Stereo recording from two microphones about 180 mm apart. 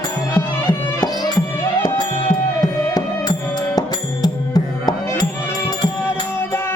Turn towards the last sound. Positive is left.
turn(degrees=20)  # may be behind; listen again after turning